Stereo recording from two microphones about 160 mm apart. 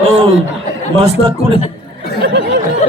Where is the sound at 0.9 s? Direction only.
40° right (ahead or behind).